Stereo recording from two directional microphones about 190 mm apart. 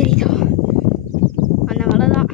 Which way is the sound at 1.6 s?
5° left (ahead or behind).